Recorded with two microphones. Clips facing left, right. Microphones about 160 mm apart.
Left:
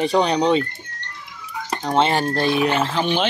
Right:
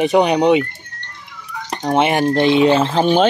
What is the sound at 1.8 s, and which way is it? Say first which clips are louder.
Speech: right 4 dB; 15° right (ahead or behind).